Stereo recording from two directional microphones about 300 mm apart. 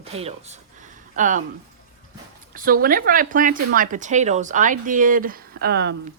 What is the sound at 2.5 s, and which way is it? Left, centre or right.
Speech, right.